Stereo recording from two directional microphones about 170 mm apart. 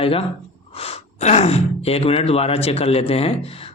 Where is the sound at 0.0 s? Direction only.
35° left (ahead or behind).